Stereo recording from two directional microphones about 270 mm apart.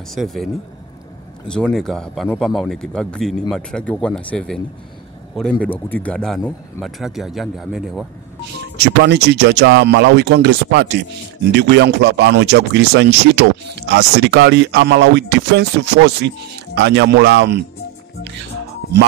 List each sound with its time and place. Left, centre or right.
0.1 s a man's voice: centre
1.5 s a man's voice: centre
8.8 s speech: right